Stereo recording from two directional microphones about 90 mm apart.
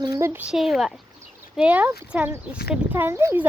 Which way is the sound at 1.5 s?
15° right (ahead or behind).